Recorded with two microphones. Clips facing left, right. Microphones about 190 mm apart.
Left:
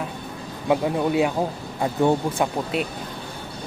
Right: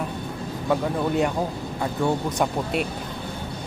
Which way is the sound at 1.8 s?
25° left (ahead or behind).